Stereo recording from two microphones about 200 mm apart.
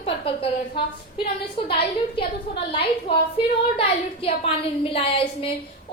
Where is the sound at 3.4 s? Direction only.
25° left (ahead or behind).